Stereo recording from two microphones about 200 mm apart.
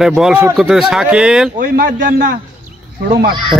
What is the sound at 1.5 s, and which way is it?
Speech, 45° right (ahead or behind).